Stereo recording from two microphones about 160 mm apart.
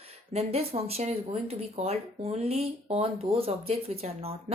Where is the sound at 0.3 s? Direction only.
40° right (ahead or behind).